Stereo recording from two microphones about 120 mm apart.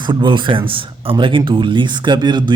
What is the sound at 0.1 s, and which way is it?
Speech, 45° right (ahead or behind).